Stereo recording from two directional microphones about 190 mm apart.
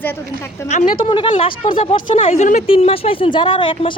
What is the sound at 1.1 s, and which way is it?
Speech, 25° left (ahead or behind).